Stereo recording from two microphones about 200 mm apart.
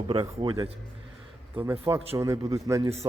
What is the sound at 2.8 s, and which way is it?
Speech, 30° right (ahead or behind).